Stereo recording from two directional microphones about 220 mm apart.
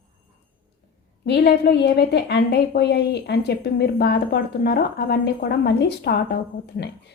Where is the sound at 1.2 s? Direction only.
50° left (ahead or behind).